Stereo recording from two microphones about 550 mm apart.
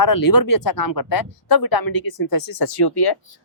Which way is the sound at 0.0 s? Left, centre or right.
Left.